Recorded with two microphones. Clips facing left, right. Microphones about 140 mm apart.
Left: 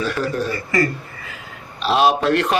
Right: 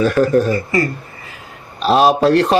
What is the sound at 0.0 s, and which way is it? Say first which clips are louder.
Speech: right 9 dB; 45° right (ahead or behind).